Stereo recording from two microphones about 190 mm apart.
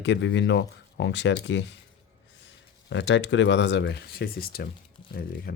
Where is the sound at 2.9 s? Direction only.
75° left (ahead or behind).